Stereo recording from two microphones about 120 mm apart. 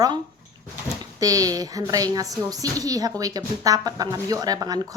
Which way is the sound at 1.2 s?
30° right (ahead or behind).